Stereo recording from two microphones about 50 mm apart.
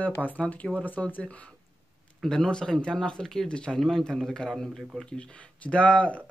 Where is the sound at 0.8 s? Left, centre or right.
Left.